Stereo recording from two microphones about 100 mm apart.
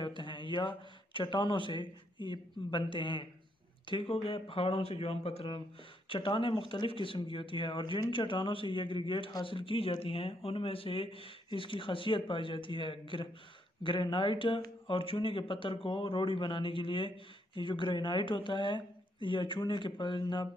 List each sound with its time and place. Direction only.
0.0 s speech: 55° left (ahead or behind); by 5.6 s 70° left (ahead or behind)
6.0 s a man's voice: 55° left (ahead or behind)